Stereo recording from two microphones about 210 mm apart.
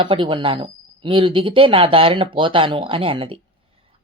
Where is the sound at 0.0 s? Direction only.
25° right (ahead or behind).